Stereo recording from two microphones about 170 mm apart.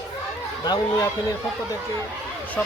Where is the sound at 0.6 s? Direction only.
25° left (ahead or behind).